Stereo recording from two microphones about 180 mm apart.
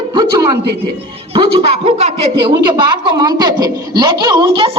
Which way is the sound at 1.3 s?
35° right (ahead or behind).